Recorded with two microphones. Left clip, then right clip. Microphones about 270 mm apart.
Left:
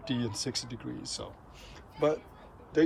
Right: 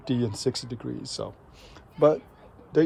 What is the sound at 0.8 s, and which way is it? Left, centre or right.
Speech, centre.